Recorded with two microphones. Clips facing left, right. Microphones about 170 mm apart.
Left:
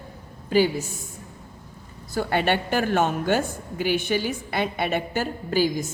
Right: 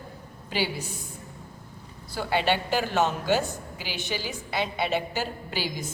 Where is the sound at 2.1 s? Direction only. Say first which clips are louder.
Left 3 dB; 50° left (ahead or behind).